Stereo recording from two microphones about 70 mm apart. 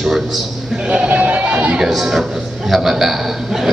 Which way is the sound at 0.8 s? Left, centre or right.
Centre.